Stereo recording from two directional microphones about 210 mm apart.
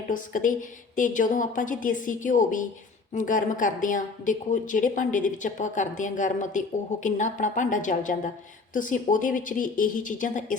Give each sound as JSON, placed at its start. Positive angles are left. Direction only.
{"t": 0.1, "sound": "speech", "side_deg": 40}